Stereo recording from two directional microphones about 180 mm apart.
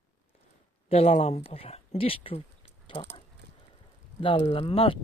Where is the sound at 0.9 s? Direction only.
35° left (ahead or behind).